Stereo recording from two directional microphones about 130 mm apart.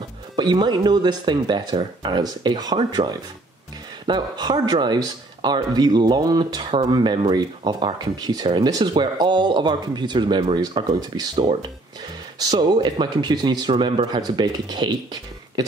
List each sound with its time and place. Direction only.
0.4 s speech: 35° right (ahead or behind)